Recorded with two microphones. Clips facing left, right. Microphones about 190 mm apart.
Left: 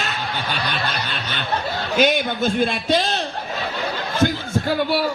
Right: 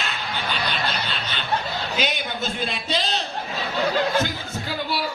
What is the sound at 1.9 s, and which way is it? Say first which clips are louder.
A man's voice: left 11 dB; 55° left (ahead or behind).